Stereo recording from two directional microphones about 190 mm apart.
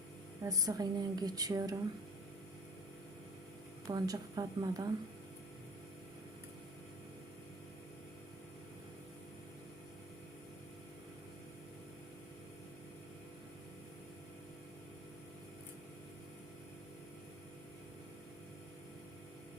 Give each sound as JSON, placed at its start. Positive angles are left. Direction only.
{"t": 0.4, "sound": "a woman's voice", "side_deg": -20}
{"t": 3.8, "sound": "a woman's voice", "side_deg": -20}